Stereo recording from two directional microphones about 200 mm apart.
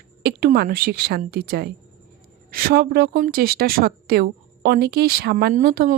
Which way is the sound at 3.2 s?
50° right (ahead or behind).